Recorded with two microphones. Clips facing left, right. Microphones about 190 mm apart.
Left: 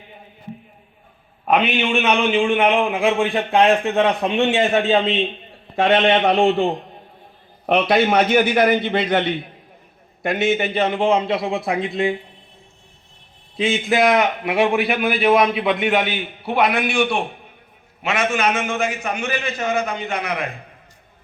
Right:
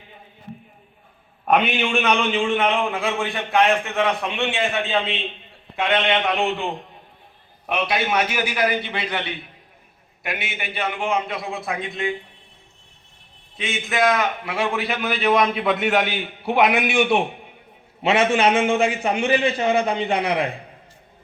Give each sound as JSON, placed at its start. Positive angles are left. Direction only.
{"t": 1.9, "sound": "a man's voice", "side_deg": 5}
{"t": 3.3, "sound": "a man's voice", "side_deg": 35}
{"t": 7.7, "sound": "a man's voice", "side_deg": 60}
{"t": 13.6, "sound": "a man's voice", "side_deg": 30}
{"t": 16.5, "sound": "a man's voice", "side_deg": 0}
{"t": 16.7, "sound": "a man's voice", "side_deg": -15}
{"t": 18.0, "sound": "a man's voice", "side_deg": -30}